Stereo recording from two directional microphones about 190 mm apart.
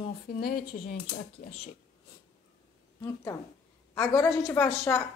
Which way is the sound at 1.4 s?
45° left (ahead or behind).